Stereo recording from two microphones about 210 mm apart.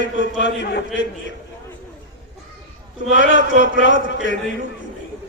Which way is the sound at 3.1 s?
60° left (ahead or behind).